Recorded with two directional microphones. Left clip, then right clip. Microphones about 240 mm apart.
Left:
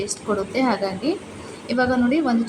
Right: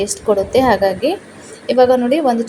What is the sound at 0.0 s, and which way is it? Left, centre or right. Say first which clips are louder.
A woman's voice: right 9 dB; centre.